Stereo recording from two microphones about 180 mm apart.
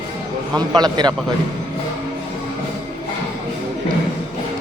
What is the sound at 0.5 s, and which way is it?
Speech, 20° right (ahead or behind).